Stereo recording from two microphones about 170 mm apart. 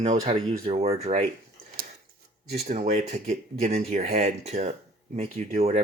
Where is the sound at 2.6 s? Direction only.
40° right (ahead or behind).